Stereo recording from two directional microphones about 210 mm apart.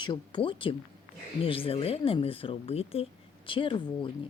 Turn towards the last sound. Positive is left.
turn(degrees=20)  # may be behind; listen again after turning